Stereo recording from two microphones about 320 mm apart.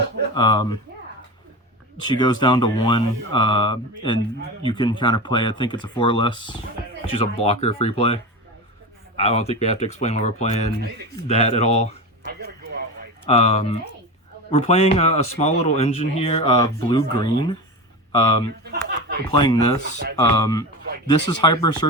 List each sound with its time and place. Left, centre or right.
0.3 s speech: centre
2.0 s speech: centre
12.2 s a sound: right
13.2 s speech: centre
18.6 s a sound: right
19.4 s speech: centre